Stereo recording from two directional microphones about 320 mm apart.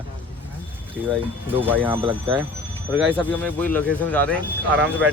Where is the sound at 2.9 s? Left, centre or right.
Centre.